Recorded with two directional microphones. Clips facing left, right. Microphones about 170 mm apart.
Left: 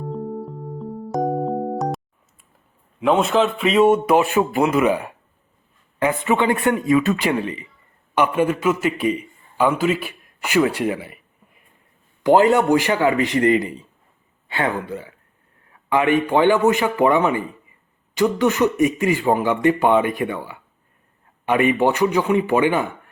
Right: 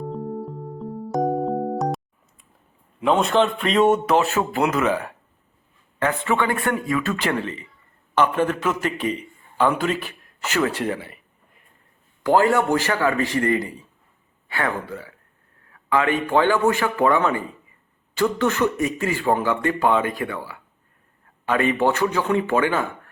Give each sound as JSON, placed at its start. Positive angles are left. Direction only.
{"t": 0.0, "sound": "music", "side_deg": 0}
{"t": 3.0, "sound": "a man's voice", "side_deg": 0}
{"t": 12.2, "sound": "a man's voice", "side_deg": 20}